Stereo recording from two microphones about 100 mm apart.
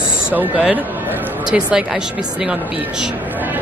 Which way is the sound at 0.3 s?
15° right (ahead or behind).